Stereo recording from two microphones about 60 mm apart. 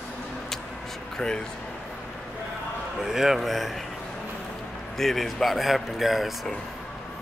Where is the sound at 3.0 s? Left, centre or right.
Centre.